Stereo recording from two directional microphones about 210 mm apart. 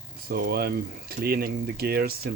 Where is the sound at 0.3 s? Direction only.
45° right (ahead or behind).